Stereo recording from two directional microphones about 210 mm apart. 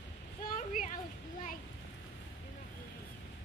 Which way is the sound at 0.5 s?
40° left (ahead or behind).